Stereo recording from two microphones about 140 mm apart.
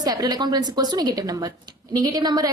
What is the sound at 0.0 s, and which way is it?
A woman's voice, 30° right (ahead or behind).